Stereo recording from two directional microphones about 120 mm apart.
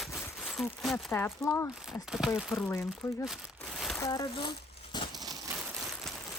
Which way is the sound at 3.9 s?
30° left (ahead or behind).